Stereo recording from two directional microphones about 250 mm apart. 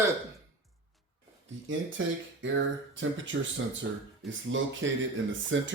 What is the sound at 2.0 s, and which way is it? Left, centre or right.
Speech, right.